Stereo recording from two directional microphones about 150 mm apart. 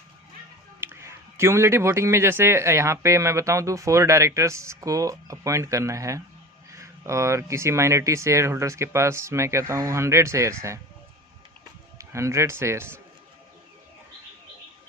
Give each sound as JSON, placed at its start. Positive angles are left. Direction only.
{"t": 0.8, "sound": "speech", "side_deg": -15}
{"t": 11.9, "sound": "a man's voice", "side_deg": -20}